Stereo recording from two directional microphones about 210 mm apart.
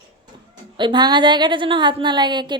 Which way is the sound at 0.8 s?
20° right (ahead or behind).